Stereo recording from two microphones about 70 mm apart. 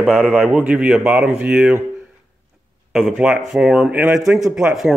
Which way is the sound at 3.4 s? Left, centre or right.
Centre.